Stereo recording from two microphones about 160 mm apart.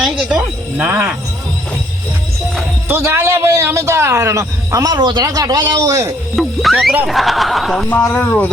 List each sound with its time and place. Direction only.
0.0 s speech: 5° right (ahead or behind)
2.9 s a man's voice: 15° right (ahead or behind)
6.3 s speech: centre (ahead or behind)